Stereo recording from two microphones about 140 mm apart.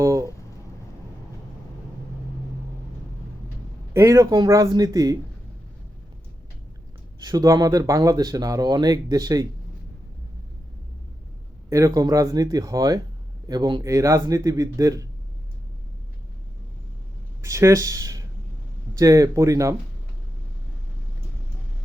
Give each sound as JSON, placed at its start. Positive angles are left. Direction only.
{"t": 0.0, "sound": "a sound", "side_deg": -25}
{"t": 3.9, "sound": "speech", "side_deg": -20}
{"t": 7.3, "sound": "speech", "side_deg": -25}
{"t": 11.7, "sound": "speech", "side_deg": -25}
{"t": 17.4, "sound": "speech", "side_deg": -20}